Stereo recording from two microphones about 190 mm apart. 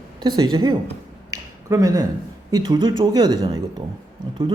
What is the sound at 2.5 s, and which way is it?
Speech, 25° right (ahead or behind).